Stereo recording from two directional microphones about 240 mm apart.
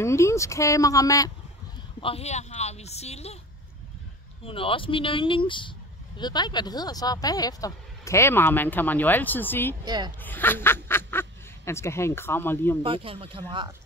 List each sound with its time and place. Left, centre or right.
0.0 s speech: centre
4.5 s speech: left
9.8 s speech: centre
10.2 s speech: centre
12.8 s speech: right